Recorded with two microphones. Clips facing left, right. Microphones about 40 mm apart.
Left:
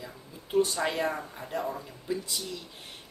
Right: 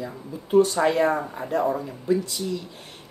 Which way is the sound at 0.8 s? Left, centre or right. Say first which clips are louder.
Right 9 dB; centre.